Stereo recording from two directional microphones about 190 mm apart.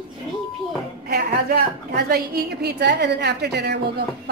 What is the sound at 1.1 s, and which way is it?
A woman's voice, 55° right (ahead or behind).